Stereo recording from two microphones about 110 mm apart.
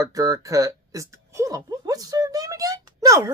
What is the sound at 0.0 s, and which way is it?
Speech, 30° right (ahead or behind).